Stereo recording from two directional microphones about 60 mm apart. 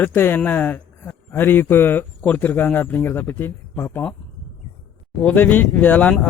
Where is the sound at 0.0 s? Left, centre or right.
Left.